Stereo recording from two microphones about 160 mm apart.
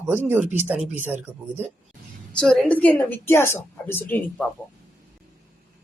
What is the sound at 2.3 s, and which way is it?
A woman's voice, 5° left (ahead or behind).